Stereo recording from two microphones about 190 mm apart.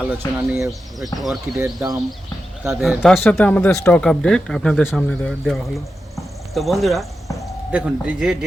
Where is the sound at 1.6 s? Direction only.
20° right (ahead or behind).